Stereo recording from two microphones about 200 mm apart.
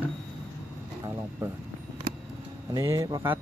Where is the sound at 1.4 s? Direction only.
15° right (ahead or behind).